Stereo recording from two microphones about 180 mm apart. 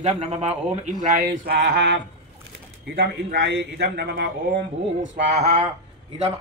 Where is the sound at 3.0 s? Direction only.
60° right (ahead or behind).